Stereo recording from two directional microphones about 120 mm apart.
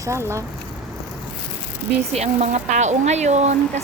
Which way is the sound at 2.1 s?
65° right (ahead or behind).